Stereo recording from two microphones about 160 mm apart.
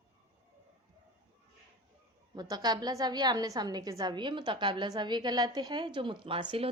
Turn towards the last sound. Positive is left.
turn(degrees=-35)  # may be behind; listen again after turning